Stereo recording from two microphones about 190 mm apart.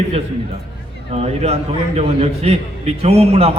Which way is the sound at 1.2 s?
35° right (ahead or behind).